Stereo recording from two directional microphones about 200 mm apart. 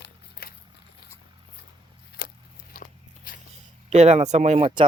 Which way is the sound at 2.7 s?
45° left (ahead or behind).